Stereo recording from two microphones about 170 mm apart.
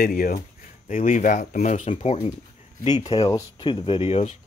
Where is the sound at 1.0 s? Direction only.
45° left (ahead or behind).